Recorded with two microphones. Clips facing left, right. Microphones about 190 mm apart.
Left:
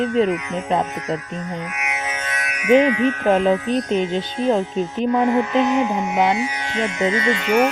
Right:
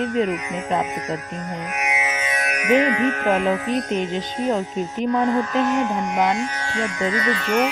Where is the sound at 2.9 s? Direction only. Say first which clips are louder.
Left 2 dB; 45° right (ahead or behind).